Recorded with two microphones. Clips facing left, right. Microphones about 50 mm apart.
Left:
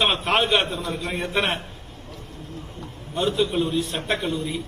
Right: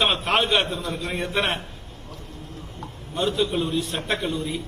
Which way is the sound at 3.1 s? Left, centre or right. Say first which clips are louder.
Left 1 dB; left.